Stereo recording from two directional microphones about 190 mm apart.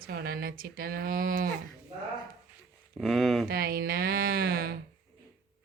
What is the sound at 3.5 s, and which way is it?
Speech, 55° right (ahead or behind).